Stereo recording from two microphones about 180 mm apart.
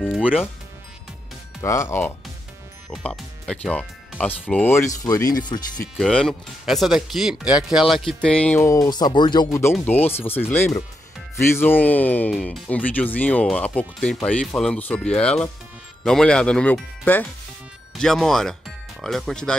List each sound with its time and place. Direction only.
0.1 s speech: centre (ahead or behind)
1.6 s speech: 15° left (ahead or behind)
2.9 s speech: centre (ahead or behind); by 5.6 s 25° left (ahead or behind)
5.9 s speech: centre (ahead or behind)